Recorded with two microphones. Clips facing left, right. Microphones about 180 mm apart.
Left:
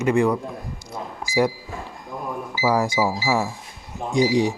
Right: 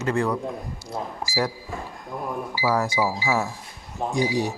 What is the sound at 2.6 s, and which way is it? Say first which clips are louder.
Speech: left 3 dB; 15° left (ahead or behind).